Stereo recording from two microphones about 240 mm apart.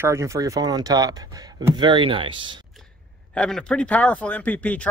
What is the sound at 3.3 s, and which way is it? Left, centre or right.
Speech, centre.